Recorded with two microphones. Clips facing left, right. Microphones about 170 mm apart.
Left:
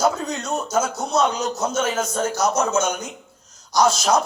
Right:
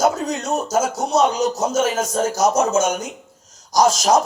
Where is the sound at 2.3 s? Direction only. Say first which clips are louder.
Right 4 dB; 45° right (ahead or behind).